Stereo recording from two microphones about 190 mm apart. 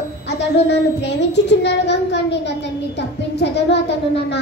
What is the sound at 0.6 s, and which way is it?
Child singing, 65° left (ahead or behind).